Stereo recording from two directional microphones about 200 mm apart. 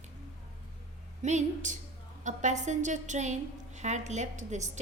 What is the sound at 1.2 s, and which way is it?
A woman's voice, 35° right (ahead or behind).